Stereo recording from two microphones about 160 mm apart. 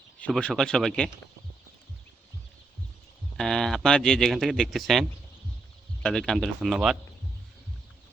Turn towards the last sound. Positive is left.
turn(degrees=0)  # may be behind; listen again after turning